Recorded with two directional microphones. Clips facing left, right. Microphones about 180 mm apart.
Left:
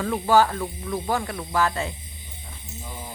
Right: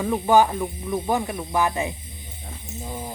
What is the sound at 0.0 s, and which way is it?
Speech, 15° right (ahead or behind).